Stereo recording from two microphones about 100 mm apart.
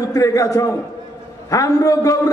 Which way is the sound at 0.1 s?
35° left (ahead or behind).